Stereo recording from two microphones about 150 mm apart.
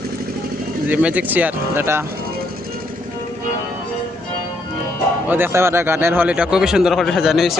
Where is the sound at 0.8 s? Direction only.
10° right (ahead or behind).